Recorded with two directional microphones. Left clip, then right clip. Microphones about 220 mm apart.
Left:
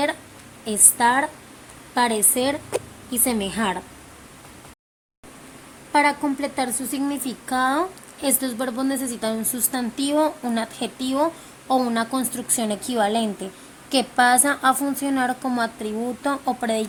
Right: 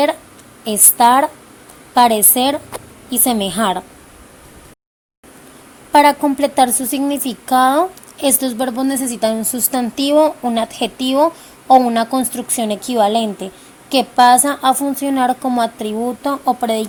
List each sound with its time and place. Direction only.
0.6 s a woman's voice: 20° right (ahead or behind)
5.9 s a woman's voice: 25° right (ahead or behind); by 16.8 s 10° right (ahead or behind)